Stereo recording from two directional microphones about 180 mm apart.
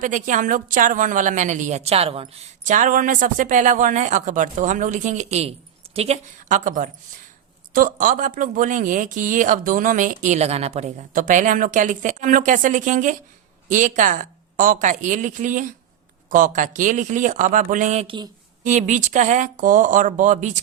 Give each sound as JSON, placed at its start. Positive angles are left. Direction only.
{"t": 0.0, "sound": "a woman's voice", "side_deg": -45}
{"t": 18.6, "sound": "a woman's voice", "side_deg": -40}